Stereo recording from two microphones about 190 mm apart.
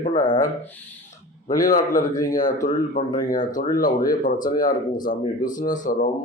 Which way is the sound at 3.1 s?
20° left (ahead or behind).